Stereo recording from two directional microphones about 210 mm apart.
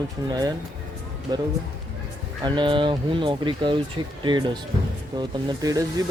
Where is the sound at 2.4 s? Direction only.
20° right (ahead or behind).